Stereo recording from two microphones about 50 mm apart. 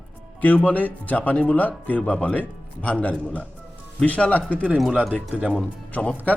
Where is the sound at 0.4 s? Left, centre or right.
Left.